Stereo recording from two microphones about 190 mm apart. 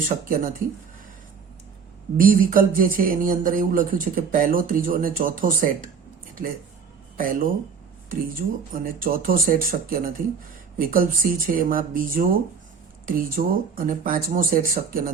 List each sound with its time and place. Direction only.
0.3 s speech: 45° right (ahead or behind)
2.1 s speech: 45° right (ahead or behind)
7.2 s speech: 45° right (ahead or behind)